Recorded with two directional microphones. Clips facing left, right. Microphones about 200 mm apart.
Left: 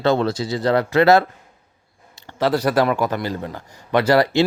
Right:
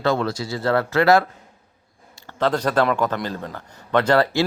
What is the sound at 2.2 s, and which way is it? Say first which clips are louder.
A man's voice: left 2 dB; 10° left (ahead or behind).